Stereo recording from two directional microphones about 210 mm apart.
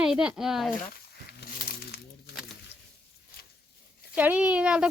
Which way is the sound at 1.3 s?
45° left (ahead or behind).